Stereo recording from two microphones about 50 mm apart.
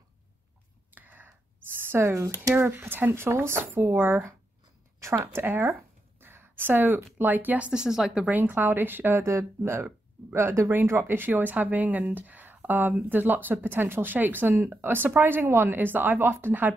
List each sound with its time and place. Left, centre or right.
0.9 s a sound: right
2.6 s speech: right
5.0 s a sound: right
6.6 s speech: right
7.7 s speech: centre
8.2 s speech: right
9.2 s speech: right
10.3 s speech: right
10.9 s speech: right